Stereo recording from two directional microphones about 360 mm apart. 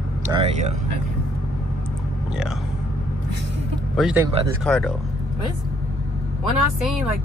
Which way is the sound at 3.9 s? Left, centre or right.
Centre.